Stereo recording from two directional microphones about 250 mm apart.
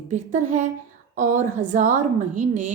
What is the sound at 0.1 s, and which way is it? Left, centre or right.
A woman's voice, right.